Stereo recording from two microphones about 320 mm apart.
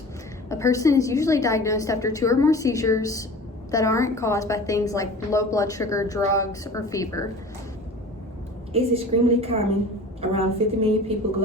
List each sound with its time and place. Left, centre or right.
0.4 s a woman's voice: centre
8.7 s a woman's voice: centre